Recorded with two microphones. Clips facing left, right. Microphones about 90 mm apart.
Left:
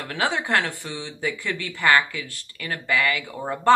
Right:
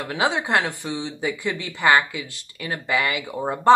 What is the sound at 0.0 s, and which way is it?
Speech, 15° right (ahead or behind).